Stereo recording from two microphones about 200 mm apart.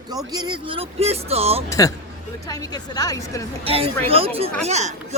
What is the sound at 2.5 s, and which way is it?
Speech, 20° left (ahead or behind).